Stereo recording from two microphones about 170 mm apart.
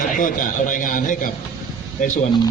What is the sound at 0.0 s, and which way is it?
A man's voice, 50° left (ahead or behind).